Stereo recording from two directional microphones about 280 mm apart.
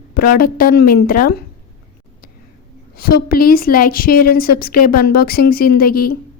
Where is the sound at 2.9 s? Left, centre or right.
Left.